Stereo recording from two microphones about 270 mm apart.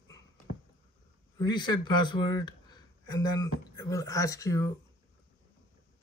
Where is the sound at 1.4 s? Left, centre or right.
Centre.